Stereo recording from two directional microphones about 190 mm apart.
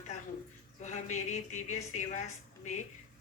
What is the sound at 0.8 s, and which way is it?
Speech, 40° left (ahead or behind).